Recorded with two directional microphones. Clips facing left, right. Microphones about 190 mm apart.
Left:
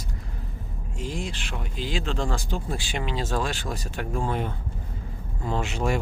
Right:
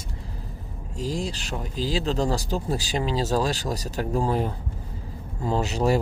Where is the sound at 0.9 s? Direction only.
35° right (ahead or behind).